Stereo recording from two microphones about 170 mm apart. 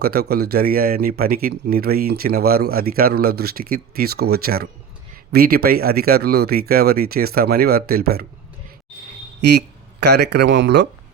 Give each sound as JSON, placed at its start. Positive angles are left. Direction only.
{"t": 0.0, "sound": "speech", "side_deg": -65}
{"t": 9.4, "sound": "speech", "side_deg": -80}